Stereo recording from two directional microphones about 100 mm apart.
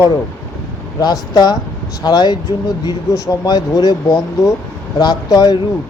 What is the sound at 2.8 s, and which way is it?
Speech, 30° left (ahead or behind).